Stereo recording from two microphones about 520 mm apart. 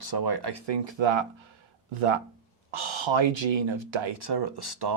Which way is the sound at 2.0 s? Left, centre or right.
Right.